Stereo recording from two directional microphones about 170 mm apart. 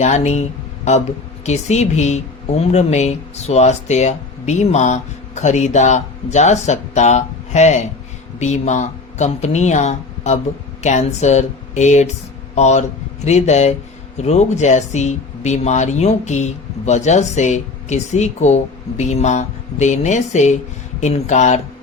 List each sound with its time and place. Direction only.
0.0 s speech: 40° left (ahead or behind)